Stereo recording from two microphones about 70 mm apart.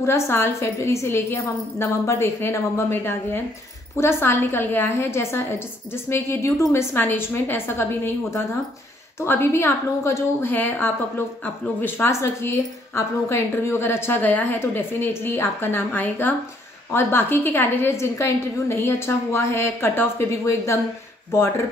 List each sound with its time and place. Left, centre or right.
0.0 s a woman's voice: left
10.5 s a woman's voice: left
12.1 s a woman's voice: left
17.9 s a woman's voice: left